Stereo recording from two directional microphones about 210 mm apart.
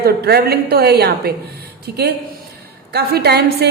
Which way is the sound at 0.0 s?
50° right (ahead or behind).